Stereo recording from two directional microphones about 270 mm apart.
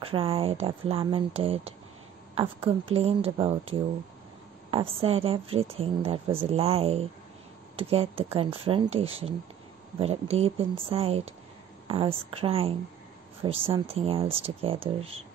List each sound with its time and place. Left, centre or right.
0.0 s speech: centre